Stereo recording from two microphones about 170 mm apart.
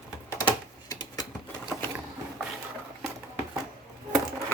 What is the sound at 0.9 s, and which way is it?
Typewriter, 25° left (ahead or behind).